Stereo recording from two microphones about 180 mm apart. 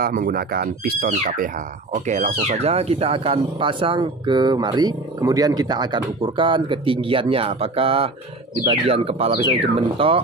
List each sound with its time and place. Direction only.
0.0 s speech: 55° right (ahead or behind)
2.0 s speech: 40° right (ahead or behind)